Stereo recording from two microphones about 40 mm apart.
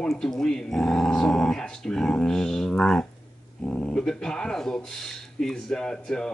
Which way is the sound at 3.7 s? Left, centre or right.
Left.